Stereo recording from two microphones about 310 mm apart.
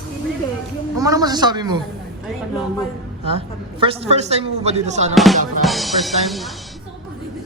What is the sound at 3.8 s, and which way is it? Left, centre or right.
Speech, centre.